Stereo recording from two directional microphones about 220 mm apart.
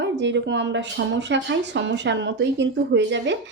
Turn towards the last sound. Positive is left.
turn(degrees=-55)  # may be behind; listen again after turning